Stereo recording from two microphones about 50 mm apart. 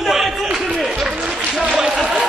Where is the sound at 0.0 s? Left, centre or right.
Centre.